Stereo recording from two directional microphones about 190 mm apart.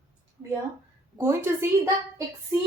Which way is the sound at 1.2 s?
15° right (ahead or behind).